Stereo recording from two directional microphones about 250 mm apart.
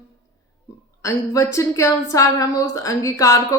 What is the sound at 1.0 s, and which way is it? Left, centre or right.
Speech, centre.